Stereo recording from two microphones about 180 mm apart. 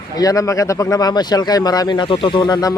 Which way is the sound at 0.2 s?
20° left (ahead or behind).